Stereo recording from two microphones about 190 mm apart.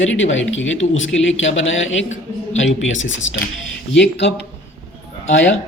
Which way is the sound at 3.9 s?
65° left (ahead or behind).